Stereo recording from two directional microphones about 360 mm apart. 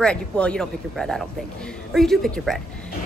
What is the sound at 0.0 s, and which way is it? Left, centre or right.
A woman's voice, centre.